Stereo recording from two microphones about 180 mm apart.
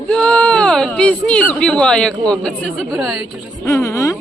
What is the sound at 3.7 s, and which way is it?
Speech, 15° left (ahead or behind).